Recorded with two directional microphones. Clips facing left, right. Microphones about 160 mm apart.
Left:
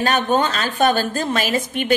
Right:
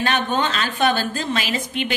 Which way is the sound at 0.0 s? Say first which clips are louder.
Left 3 dB; 40° left (ahead or behind).